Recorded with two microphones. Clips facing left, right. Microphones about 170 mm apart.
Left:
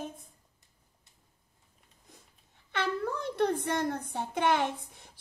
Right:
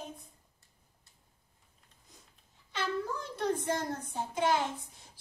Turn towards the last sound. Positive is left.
turn(degrees=60)  # may be behind; listen again after turning